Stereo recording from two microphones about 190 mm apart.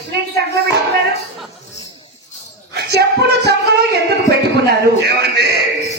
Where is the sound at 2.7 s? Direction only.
60° right (ahead or behind).